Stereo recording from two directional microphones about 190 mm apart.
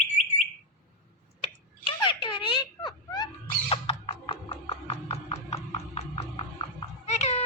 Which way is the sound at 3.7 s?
30° left (ahead or behind).